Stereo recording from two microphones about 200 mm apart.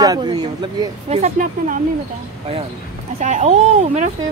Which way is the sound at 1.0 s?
35° right (ahead or behind).